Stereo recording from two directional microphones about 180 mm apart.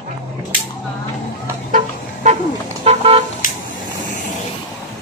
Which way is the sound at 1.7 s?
45° right (ahead or behind).